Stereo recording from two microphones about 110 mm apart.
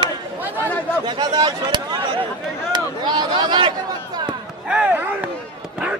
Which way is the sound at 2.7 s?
40° right (ahead or behind).